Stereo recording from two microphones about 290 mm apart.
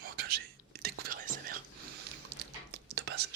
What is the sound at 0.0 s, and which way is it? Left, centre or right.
Whispering, right.